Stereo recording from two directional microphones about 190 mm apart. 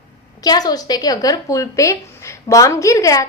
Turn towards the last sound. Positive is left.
turn(degrees=15)  # may be behind; listen again after turning